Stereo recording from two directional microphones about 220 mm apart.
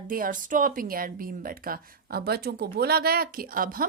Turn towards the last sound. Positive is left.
turn(degrees=-40)  # may be behind; listen again after turning